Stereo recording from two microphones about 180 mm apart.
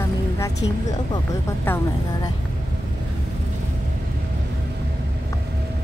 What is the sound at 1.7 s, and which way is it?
Speech, 10° left (ahead or behind).